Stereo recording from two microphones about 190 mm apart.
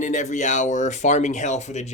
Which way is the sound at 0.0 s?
40° left (ahead or behind).